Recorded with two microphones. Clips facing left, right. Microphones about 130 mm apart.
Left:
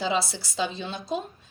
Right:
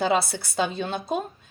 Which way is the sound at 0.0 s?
55° right (ahead or behind).